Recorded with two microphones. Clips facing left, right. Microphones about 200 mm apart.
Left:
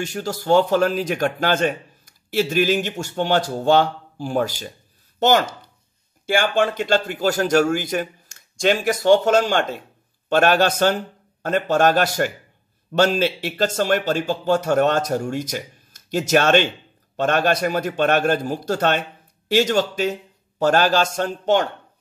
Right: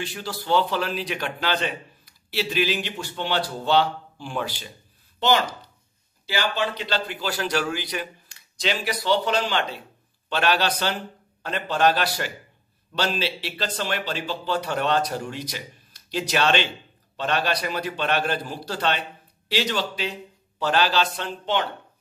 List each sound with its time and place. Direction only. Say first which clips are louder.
0.0 s speech: left 6 dB; 45° left (ahead or behind)
6.2 s speech: left 7 dB; 50° left (ahead or behind)